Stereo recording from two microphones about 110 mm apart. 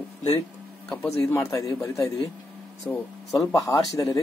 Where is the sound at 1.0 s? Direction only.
20° left (ahead or behind).